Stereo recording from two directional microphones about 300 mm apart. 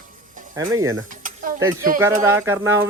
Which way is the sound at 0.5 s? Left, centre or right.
Centre.